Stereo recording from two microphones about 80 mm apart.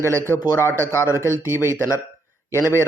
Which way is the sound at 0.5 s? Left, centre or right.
Left.